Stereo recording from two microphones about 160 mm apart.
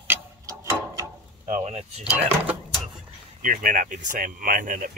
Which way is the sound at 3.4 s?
55° right (ahead or behind).